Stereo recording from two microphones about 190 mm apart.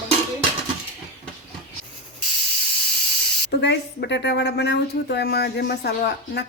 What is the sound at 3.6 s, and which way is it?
Speech, 65° left (ahead or behind).